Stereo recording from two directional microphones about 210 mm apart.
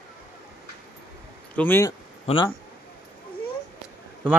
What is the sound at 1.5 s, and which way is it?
Speech, 10° left (ahead or behind).